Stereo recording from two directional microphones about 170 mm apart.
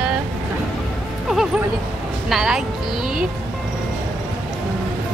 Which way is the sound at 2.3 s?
5° right (ahead or behind).